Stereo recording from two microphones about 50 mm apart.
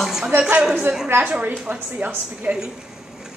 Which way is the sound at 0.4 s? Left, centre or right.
Centre.